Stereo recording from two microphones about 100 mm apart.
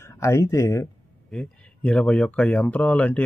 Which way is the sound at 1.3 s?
10° left (ahead or behind).